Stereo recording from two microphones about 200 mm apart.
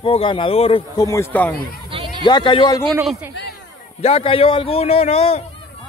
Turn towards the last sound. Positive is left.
turn(degrees=30)  # may be behind; listen again after turning